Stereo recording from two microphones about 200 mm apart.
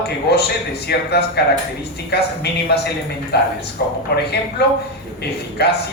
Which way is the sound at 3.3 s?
55° left (ahead or behind).